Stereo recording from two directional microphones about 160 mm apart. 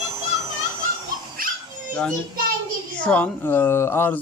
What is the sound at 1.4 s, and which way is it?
Dog, 60° right (ahead or behind).